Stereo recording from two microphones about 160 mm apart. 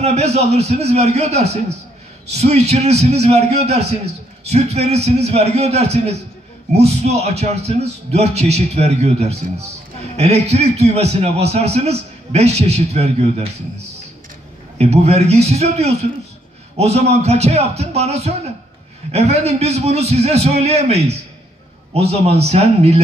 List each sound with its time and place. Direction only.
0.0 s a man's voice: 40° right (ahead or behind)
14.8 s a man's voice: 40° right (ahead or behind)